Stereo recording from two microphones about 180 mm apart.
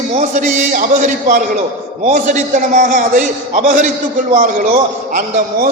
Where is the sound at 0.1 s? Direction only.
45° right (ahead or behind).